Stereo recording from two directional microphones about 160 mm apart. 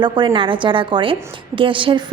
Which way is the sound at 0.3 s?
30° right (ahead or behind).